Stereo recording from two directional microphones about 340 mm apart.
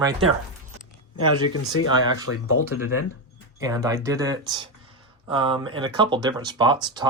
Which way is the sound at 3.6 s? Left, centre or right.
Centre.